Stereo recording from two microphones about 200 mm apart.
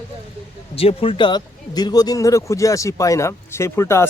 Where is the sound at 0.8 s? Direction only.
30° left (ahead or behind).